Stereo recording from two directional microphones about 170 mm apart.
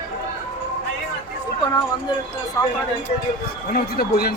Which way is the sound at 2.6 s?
20° left (ahead or behind).